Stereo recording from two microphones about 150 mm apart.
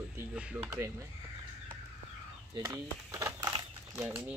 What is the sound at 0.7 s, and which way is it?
Speech, 20° right (ahead or behind).